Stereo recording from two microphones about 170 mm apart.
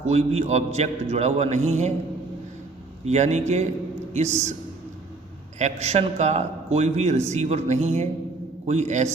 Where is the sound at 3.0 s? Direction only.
40° right (ahead or behind).